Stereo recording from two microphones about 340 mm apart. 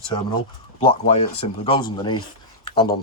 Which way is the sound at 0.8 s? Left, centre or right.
Centre.